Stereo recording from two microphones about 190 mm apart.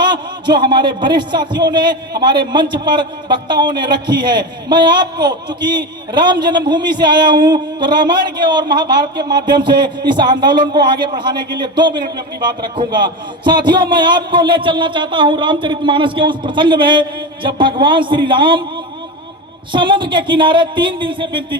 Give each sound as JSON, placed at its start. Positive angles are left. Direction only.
{"t": 0.4, "sound": "a man's voice", "side_deg": -25}
{"t": 19.7, "sound": "a man's voice", "side_deg": -25}